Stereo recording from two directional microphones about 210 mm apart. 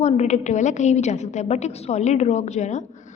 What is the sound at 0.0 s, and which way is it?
A woman's voice, 35° left (ahead or behind).